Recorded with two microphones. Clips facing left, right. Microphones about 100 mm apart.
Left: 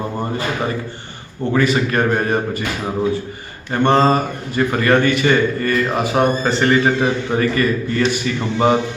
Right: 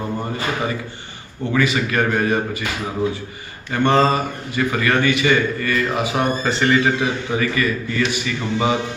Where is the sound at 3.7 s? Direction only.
35° left (ahead or behind).